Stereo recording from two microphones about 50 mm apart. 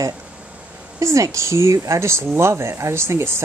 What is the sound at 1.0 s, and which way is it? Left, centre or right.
Speech, right.